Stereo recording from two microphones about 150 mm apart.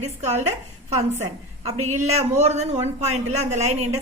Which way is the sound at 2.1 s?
45° right (ahead or behind).